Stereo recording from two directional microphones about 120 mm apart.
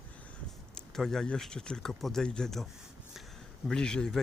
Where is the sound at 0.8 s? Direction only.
5° left (ahead or behind).